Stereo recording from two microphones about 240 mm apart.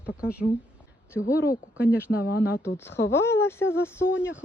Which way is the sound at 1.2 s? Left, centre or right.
Left.